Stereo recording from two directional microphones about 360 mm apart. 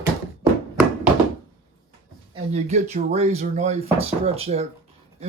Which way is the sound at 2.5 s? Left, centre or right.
Centre.